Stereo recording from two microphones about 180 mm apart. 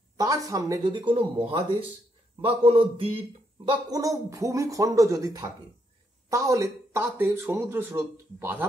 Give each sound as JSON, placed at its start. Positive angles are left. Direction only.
{"t": 0.5, "sound": "a man's voice", "side_deg": -20}
{"t": 3.6, "sound": "speech", "side_deg": -20}